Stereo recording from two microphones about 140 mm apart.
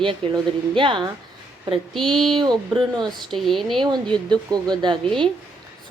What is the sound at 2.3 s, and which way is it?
Speech, 35° right (ahead or behind).